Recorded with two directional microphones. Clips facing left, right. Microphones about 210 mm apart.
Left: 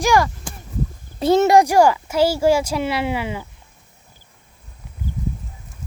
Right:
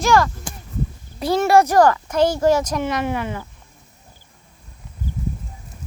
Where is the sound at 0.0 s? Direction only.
15° left (ahead or behind).